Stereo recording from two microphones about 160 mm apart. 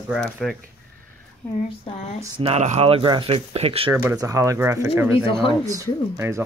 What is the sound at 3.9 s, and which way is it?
Speech, 15° right (ahead or behind).